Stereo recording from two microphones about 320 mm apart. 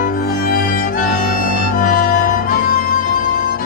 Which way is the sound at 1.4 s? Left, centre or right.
Left.